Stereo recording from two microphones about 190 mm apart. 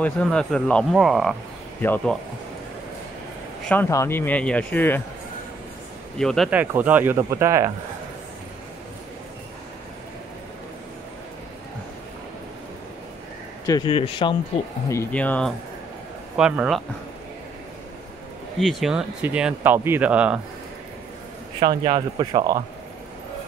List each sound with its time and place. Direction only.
0.0 s speech: 5° left (ahead or behind)
1.8 s speech: 10° left (ahead or behind)
3.6 s speech: 10° left (ahead or behind)
6.1 s speech: centre (ahead or behind); by 7.7 s 15° right (ahead or behind)
13.8 s speech: 30° left (ahead or behind)
14.9 s speech: 10° left (ahead or behind)
16.3 s speech: 5° right (ahead or behind)
18.6 s speech: centre (ahead or behind)
21.5 s speech: 20° right (ahead or behind)